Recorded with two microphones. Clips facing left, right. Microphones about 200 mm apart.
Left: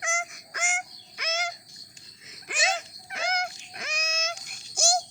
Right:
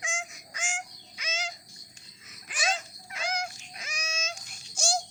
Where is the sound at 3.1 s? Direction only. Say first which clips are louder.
Left 3 dB; 55° left (ahead or behind).